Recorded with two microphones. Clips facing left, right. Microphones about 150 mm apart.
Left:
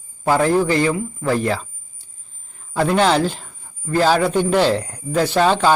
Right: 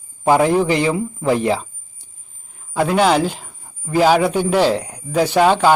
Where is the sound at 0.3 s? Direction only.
20° right (ahead or behind).